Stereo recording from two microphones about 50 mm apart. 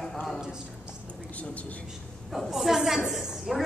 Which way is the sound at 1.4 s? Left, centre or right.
Left.